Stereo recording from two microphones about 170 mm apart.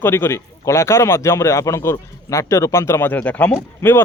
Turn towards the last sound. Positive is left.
turn(degrees=15)  # may be behind; listen again after turning